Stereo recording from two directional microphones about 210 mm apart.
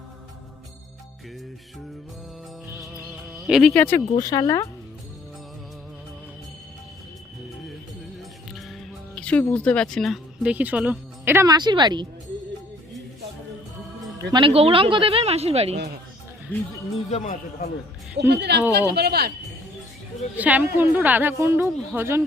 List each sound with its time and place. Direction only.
3.4 s speech: centre (ahead or behind); by 4.6 s 15° left (ahead or behind)
9.1 s speech: 5° left (ahead or behind); by 12.0 s 20° right (ahead or behind)
14.3 s speech: 25° right (ahead or behind)
16.5 s speech: 10° left (ahead or behind)
17.1 s speech: 35° left (ahead or behind)
18.2 s speech: 55° right (ahead or behind)
20.3 s a woman's voice: 5° right (ahead or behind)